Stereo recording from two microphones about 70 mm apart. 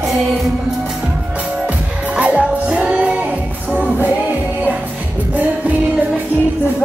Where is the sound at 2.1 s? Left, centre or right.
Centre.